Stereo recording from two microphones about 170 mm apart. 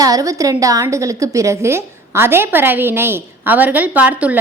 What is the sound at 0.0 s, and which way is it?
A woman's voice, 20° right (ahead or behind).